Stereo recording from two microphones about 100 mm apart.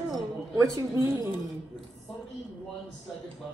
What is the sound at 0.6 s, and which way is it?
Speech, 35° right (ahead or behind).